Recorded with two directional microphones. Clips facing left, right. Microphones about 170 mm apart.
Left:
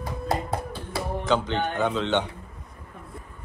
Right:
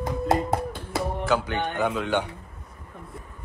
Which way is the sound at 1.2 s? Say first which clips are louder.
Left 2 dB; 10° right (ahead or behind).